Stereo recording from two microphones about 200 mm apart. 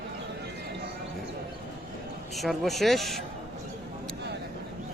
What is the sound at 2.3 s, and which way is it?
Speech, centre (ahead or behind).